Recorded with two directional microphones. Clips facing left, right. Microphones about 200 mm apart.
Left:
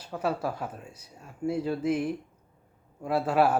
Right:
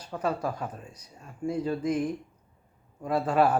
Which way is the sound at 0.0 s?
10° left (ahead or behind).